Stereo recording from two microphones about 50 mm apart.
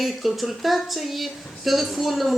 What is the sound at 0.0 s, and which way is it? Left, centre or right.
Speech, centre.